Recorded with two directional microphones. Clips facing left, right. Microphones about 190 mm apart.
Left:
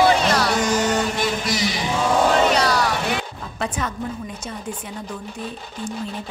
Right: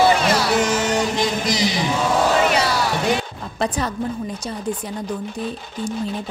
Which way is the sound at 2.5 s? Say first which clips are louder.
Left 1 dB; 5° right (ahead or behind).